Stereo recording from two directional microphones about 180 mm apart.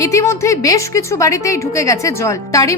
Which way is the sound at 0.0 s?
15° left (ahead or behind).